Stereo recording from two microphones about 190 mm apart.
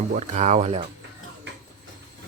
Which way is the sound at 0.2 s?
40° right (ahead or behind).